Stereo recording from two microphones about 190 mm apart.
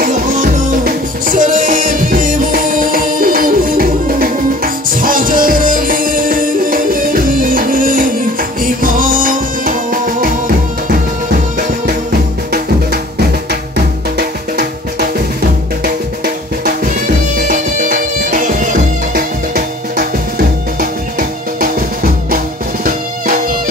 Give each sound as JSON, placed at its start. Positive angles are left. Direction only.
{"t": 0.0, "sound": "music", "side_deg": -45}
{"t": 14.1, "sound": "music", "side_deg": -60}
{"t": 17.5, "sound": "music", "side_deg": -45}